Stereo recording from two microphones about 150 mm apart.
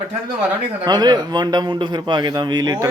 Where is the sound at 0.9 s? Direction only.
30° right (ahead or behind).